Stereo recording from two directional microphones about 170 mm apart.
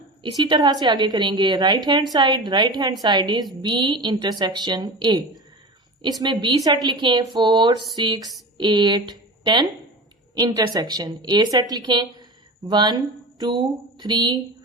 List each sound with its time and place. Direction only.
0.2 s a woman's voice: 25° right (ahead or behind)